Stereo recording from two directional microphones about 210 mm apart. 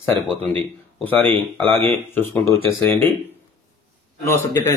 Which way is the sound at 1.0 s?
10° left (ahead or behind).